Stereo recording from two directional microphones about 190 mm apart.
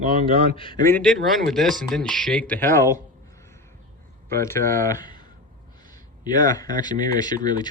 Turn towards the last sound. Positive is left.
turn(degrees=20)  # may be behind; listen again after turning